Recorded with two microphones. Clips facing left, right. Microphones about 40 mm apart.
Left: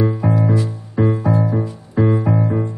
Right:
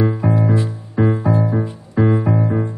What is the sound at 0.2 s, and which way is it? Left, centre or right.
Music, centre.